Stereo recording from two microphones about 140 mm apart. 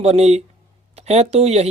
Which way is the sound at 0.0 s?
50° right (ahead or behind).